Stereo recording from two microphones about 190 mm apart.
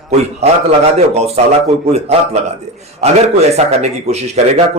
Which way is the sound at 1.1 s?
35° right (ahead or behind).